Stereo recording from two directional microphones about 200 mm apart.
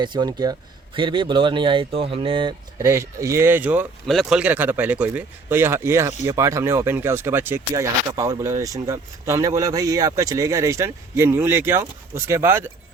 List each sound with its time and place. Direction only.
0.0 s speech: 20° right (ahead or behind)